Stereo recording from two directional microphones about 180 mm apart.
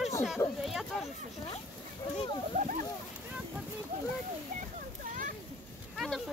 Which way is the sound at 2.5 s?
45° right (ahead or behind).